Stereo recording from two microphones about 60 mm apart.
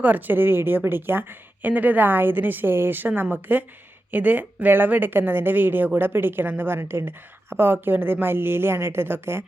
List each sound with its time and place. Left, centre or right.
0.0 s a woman's voice: right